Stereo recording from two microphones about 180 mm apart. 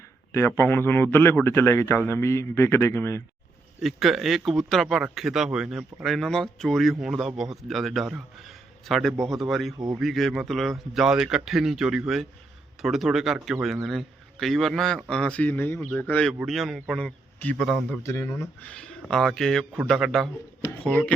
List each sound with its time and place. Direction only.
0.3 s a man's voice: 15° left (ahead or behind)
3.8 s a man's voice: centre (ahead or behind)
9.7 s speech: 20° right (ahead or behind)
10.0 s a man's voice: centre (ahead or behind)